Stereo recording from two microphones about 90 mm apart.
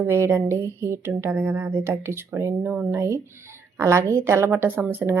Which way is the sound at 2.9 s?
30° right (ahead or behind).